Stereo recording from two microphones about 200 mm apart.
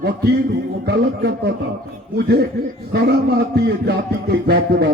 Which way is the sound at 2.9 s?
55° right (ahead or behind).